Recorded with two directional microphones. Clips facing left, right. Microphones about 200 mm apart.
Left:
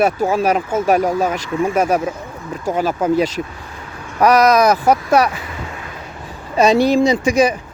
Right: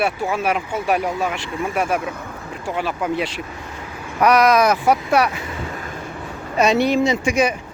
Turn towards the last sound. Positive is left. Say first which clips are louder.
# left 4 dB
turn(degrees=35)  # may be behind; listen again after turning